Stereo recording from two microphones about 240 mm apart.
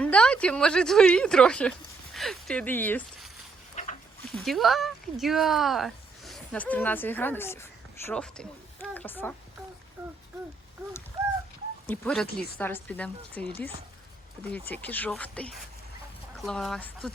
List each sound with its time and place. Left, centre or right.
0.0 s a woman's voice: centre
3.8 s dog: left
4.4 s speech: centre
11.9 s speech: centre
14.5 s a woman's voice: centre